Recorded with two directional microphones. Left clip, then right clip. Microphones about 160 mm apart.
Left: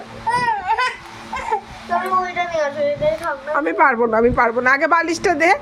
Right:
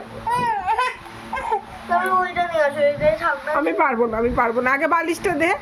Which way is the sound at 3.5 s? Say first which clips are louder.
Left 6 dB; 30° left (ahead or behind).